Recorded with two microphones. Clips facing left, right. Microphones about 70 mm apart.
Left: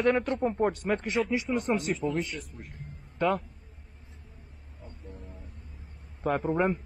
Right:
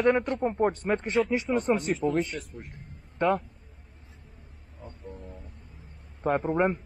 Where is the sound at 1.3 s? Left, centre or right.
Right.